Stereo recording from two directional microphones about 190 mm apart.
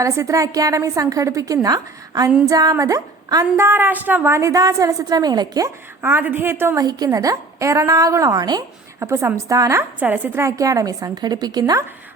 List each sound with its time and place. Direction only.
0.0 s a woman's voice: 15° right (ahead or behind)
6.0 s a woman's voice: 10° right (ahead or behind)